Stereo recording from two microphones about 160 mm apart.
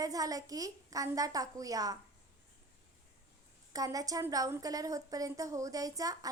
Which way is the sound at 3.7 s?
20° right (ahead or behind).